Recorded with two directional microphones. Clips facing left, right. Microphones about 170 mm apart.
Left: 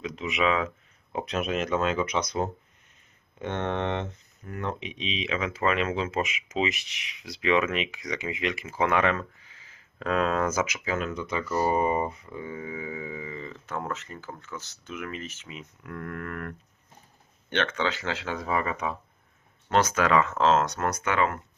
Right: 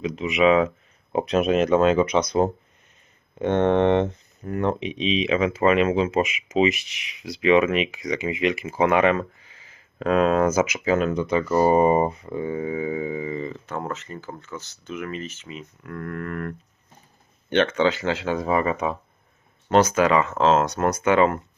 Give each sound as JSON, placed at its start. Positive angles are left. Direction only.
{"t": 0.0, "sound": "speech", "side_deg": -5}
{"t": 1.1, "sound": "speech", "side_deg": -25}
{"t": 3.3, "sound": "speech", "side_deg": -60}
{"t": 4.4, "sound": "a sound", "side_deg": -40}
{"t": 4.8, "sound": "speech", "side_deg": -20}
{"t": 10.8, "sound": "speech", "side_deg": -30}
{"t": 11.2, "sound": "speech", "side_deg": -60}
{"t": 11.7, "sound": "speech", "side_deg": -70}
{"t": 11.9, "sound": "a sound", "side_deg": -50}
{"t": 13.8, "sound": "speech", "side_deg": -5}
{"t": 17.5, "sound": "speech", "side_deg": -10}
{"t": 19.9, "sound": "speech", "side_deg": -5}
{"t": 20.7, "sound": "speech", "side_deg": -20}